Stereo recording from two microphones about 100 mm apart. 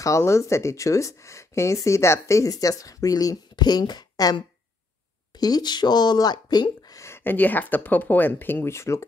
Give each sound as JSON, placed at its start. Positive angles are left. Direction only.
{"t": 0.0, "sound": "speech", "side_deg": 30}
{"t": 7.1, "sound": "speech", "side_deg": 20}